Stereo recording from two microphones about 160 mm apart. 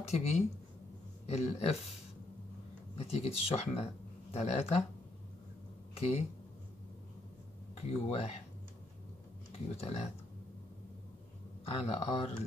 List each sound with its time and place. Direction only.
0.0 s speech: 40° left (ahead or behind)
3.0 s speech: 40° left (ahead or behind)
5.9 s speech: 40° left (ahead or behind)
7.7 s speech: 40° left (ahead or behind)
9.8 s speech: 40° left (ahead or behind)
11.6 s speech: 35° left (ahead or behind)